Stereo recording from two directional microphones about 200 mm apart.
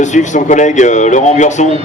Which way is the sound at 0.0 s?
35° left (ahead or behind).